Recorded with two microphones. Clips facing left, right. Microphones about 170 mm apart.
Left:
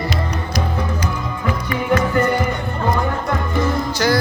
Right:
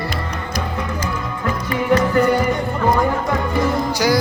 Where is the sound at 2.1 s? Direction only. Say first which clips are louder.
Right 2 dB; 10° right (ahead or behind).